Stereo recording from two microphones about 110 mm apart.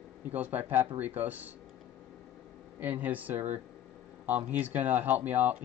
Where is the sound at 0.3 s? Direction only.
15° right (ahead or behind).